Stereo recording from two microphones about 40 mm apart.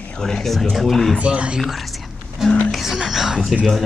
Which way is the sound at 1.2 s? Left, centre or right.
Right.